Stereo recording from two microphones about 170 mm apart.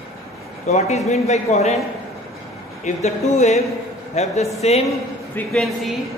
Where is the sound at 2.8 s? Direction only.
45° left (ahead or behind).